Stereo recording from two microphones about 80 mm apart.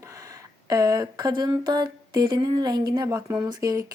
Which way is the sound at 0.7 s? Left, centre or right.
Right.